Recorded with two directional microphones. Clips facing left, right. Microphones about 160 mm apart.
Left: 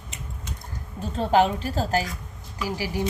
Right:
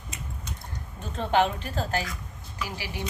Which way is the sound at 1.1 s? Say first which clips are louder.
Left 4 dB; 35° left (ahead or behind).